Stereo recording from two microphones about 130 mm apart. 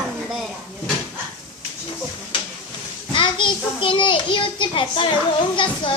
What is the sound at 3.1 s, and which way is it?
A woman's voice, 40° left (ahead or behind).